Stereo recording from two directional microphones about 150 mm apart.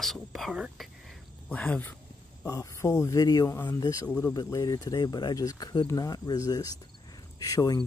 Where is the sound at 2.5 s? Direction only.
20° left (ahead or behind).